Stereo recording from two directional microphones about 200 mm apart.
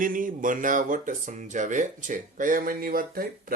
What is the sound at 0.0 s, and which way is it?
Speech, 40° right (ahead or behind).